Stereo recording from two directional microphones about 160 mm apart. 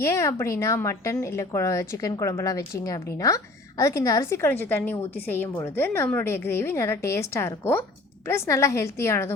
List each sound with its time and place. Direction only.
0.0 s a woman's voice: 15° left (ahead or behind)